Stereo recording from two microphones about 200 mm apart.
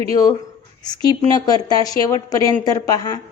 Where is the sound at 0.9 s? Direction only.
20° left (ahead or behind).